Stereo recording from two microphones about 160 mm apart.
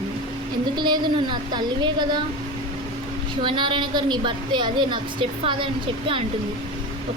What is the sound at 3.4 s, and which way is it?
A woman's voice, 30° right (ahead or behind).